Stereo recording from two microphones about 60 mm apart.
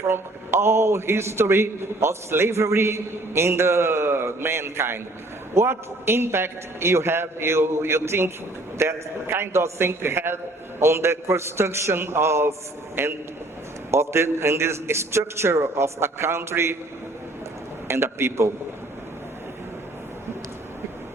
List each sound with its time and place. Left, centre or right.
0.1 s a man's voice: right
17.8 s a man's voice: right